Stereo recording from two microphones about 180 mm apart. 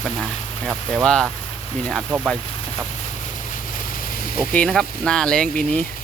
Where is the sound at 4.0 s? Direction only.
50° left (ahead or behind).